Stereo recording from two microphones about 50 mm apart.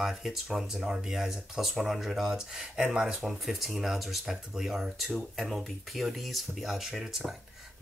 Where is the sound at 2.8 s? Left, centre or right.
Centre.